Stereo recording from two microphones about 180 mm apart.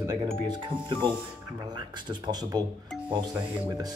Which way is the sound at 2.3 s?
20° right (ahead or behind).